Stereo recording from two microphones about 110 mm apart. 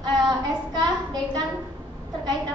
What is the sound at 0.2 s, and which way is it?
Child singing, 40° right (ahead or behind).